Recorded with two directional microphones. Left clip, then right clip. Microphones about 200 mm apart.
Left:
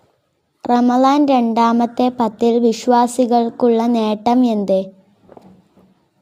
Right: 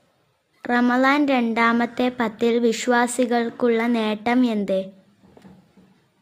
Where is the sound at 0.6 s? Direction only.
20° left (ahead or behind).